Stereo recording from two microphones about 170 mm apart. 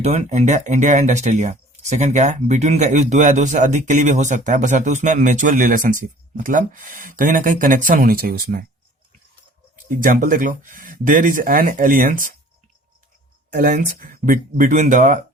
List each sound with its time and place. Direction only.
0.0 s speech: 40° right (ahead or behind); by 8.6 s 60° right (ahead or behind)
9.9 s speech: 55° right (ahead or behind)
13.5 s speech: 55° right (ahead or behind)